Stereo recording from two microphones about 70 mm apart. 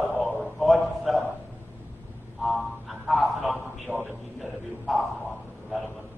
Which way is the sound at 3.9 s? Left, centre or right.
Right.